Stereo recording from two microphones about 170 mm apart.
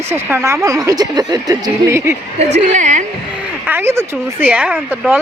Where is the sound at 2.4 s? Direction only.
45° right (ahead or behind).